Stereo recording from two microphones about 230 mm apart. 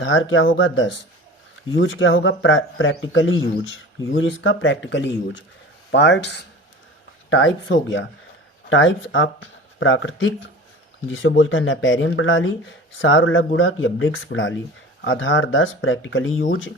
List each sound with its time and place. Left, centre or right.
0.0 s a man's voice: left